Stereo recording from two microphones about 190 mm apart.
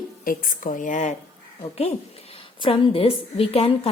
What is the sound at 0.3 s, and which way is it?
A woman's voice, 45° left (ahead or behind).